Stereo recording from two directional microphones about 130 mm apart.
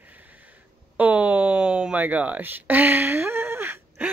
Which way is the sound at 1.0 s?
10° right (ahead or behind).